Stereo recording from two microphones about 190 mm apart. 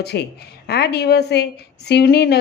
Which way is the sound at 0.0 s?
60° left (ahead or behind).